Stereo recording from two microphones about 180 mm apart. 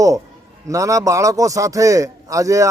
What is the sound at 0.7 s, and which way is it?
A man's voice, 15° right (ahead or behind).